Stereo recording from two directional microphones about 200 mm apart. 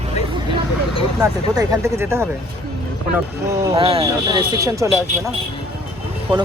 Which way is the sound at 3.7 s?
30° right (ahead or behind).